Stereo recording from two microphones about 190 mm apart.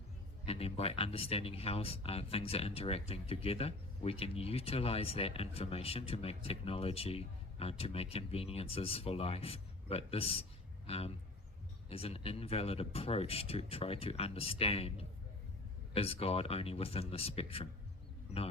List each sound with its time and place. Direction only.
0.4 s speech: 30° left (ahead or behind)